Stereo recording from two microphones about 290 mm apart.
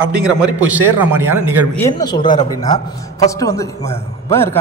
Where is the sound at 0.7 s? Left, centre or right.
Centre.